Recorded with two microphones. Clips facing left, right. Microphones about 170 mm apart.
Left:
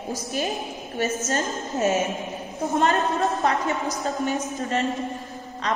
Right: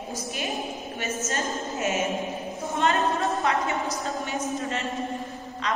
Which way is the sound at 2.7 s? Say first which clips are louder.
Left 2 dB; 40° left (ahead or behind).